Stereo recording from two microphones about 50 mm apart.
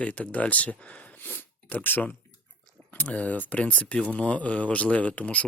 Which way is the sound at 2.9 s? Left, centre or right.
Left.